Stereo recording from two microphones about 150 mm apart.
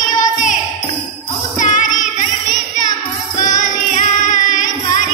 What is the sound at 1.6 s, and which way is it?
Child singing, 60° left (ahead or behind).